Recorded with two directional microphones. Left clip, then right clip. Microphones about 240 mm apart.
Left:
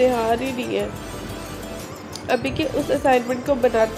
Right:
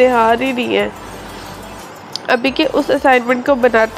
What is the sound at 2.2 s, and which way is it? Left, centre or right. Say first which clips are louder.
Speech: right 8 dB; centre.